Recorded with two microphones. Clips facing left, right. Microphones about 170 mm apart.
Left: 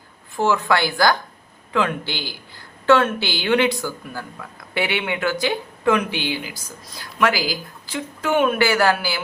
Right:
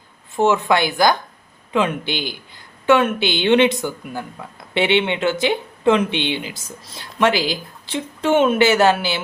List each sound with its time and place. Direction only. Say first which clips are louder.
0.3 s speech: right 3 dB; 20° right (ahead or behind)